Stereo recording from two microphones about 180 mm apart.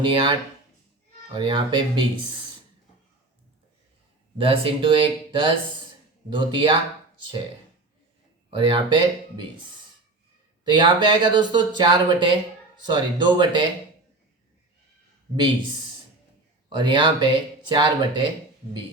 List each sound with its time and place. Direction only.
0.0 s speech: 30° right (ahead or behind)
1.4 s speech: 25° right (ahead or behind)
4.4 s speech: 30° right (ahead or behind)
8.5 s speech: 25° right (ahead or behind)
10.7 s speech: 25° right (ahead or behind)
16.7 s speech: 25° right (ahead or behind)